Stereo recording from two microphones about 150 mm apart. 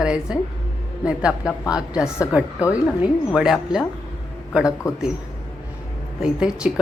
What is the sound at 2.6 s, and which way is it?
Speech, 20° left (ahead or behind).